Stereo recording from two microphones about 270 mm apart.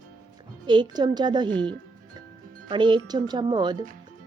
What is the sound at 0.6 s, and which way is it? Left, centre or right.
A woman's voice, centre.